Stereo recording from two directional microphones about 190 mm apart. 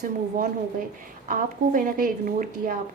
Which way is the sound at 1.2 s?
45° right (ahead or behind).